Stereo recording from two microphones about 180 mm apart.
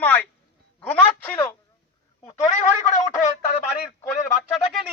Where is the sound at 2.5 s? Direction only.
40° left (ahead or behind).